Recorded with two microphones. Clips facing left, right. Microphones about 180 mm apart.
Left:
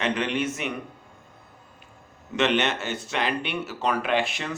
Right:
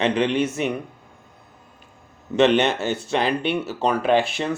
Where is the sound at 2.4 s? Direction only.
35° right (ahead or behind).